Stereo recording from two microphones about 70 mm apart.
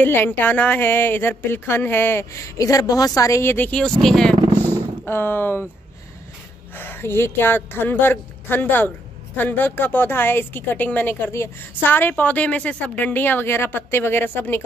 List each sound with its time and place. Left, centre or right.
0.0 s a woman's voice: left
2.5 s a woman's voice: left
3.4 s a woman's voice: left
3.7 s speech: centre
5.0 s a woman's voice: left
6.8 s a woman's voice: left